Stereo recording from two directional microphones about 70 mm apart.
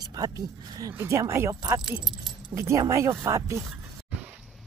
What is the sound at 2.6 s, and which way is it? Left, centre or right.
Speech, right.